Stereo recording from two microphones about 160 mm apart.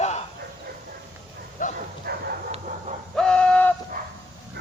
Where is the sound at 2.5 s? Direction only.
45° right (ahead or behind).